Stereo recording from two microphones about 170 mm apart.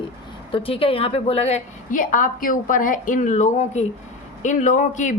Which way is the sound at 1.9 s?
50° left (ahead or behind).